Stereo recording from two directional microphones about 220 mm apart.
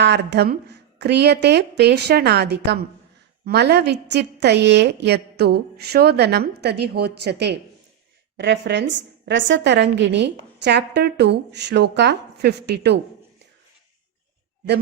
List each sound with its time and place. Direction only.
0.0 s a woman's voice: 50° right (ahead or behind)